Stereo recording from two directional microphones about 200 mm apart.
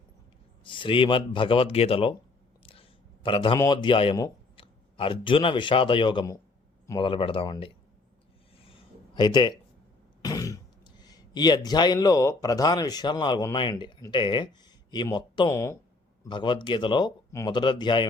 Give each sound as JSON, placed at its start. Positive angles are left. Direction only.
{"t": 0.6, "sound": "speech", "side_deg": 25}
{"t": 3.2, "sound": "speech", "side_deg": 25}
{"t": 8.5, "sound": "a sound", "side_deg": 30}
{"t": 10.2, "sound": "speech", "side_deg": 15}